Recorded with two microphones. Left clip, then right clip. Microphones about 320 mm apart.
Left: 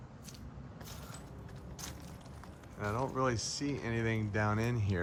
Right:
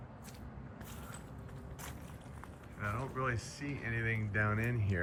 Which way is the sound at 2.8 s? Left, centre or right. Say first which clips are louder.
Left 4 dB; centre.